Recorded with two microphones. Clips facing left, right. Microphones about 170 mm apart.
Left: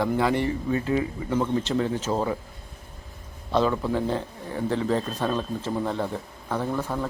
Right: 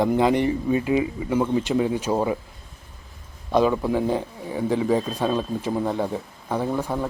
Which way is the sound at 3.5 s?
15° right (ahead or behind).